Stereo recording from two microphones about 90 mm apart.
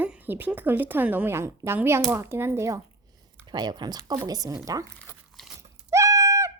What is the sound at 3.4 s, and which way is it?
Speech, 55° right (ahead or behind).